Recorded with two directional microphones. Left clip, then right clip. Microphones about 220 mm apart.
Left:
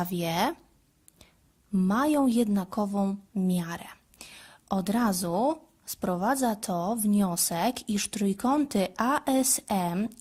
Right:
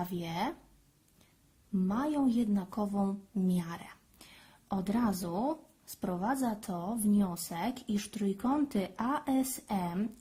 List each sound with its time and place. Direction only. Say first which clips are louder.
0.0 s speech: left 8 dB; 30° left (ahead or behind)
1.9 s speech: left 7 dB; 30° left (ahead or behind)